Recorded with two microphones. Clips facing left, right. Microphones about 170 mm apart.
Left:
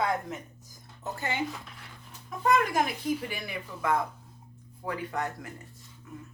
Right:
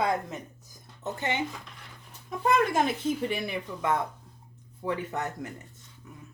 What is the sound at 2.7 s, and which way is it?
Speech, 25° right (ahead or behind).